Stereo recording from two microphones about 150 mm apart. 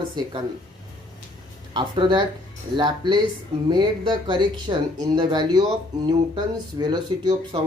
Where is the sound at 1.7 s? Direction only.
35° right (ahead or behind).